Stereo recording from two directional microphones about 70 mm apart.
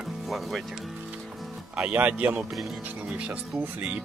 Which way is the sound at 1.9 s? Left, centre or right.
Right.